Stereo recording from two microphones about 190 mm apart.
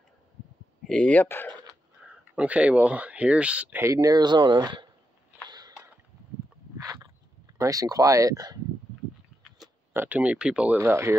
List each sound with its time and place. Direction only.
0.8 s speech: 5° left (ahead or behind)
2.0 s speech: 5° right (ahead or behind); by 4.8 s 25° right (ahead or behind)
5.5 s a sound: 20° right (ahead or behind)
6.8 s a sound: 20° right (ahead or behind)
7.5 s speech: 20° right (ahead or behind)
9.9 s speech: 10° right (ahead or behind)